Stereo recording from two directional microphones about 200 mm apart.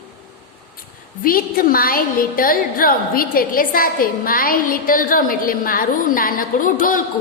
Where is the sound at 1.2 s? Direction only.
45° left (ahead or behind).